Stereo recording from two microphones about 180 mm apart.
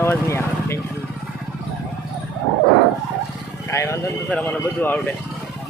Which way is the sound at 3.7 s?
15° left (ahead or behind).